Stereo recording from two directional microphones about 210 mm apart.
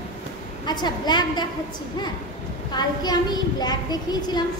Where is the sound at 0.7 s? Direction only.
20° left (ahead or behind).